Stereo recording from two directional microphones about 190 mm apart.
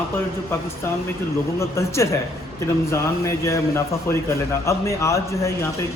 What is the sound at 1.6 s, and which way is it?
Speech, 15° left (ahead or behind).